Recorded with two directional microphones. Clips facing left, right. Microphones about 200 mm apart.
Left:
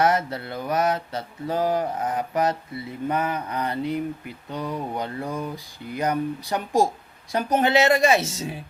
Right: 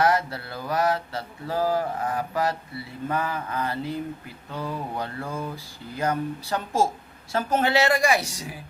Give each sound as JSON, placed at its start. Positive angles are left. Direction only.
{"t": 0.0, "sound": "mantra", "side_deg": 20}
{"t": 4.5, "sound": "speech", "side_deg": 20}
{"t": 7.3, "sound": "mantra", "side_deg": 20}